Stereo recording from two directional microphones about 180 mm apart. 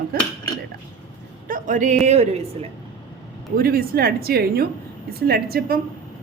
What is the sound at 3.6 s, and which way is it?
A woman's voice, 55° right (ahead or behind).